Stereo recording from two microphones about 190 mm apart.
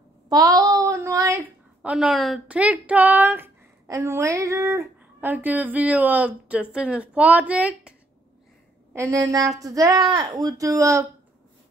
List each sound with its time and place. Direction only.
0.3 s a woman's voice: 20° right (ahead or behind)
8.9 s speech: 15° right (ahead or behind)